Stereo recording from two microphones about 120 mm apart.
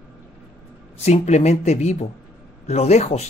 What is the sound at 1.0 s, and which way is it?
Speech, 70° left (ahead or behind).